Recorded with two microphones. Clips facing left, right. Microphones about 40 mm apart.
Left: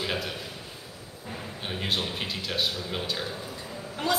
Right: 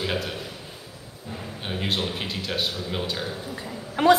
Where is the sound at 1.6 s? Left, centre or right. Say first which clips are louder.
Right 3 dB; centre.